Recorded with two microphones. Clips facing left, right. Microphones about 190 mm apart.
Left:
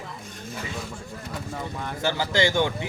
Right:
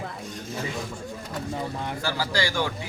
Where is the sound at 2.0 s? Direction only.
20° left (ahead or behind).